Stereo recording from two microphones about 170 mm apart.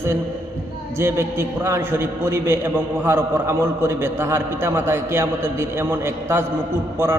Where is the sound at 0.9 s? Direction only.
15° right (ahead or behind).